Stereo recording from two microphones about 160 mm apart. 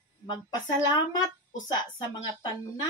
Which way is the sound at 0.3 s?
25° left (ahead or behind).